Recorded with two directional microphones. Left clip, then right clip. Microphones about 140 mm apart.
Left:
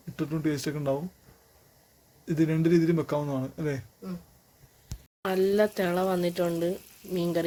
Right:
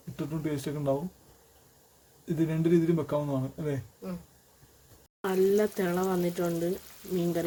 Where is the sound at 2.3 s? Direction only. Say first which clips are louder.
Left 2 dB; 20° left (ahead or behind).